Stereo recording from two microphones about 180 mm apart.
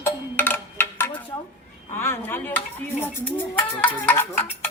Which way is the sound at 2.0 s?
15° left (ahead or behind).